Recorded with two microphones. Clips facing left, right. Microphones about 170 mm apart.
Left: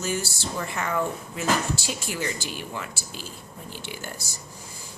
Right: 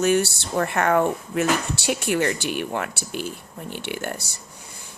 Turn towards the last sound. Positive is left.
turn(degrees=-65)  # may be behind; listen again after turning